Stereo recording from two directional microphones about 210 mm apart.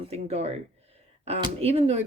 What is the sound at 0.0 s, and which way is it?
Speech, 30° right (ahead or behind).